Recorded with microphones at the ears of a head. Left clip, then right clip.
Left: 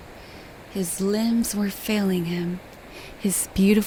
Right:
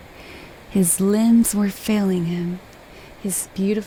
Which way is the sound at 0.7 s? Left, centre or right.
Right.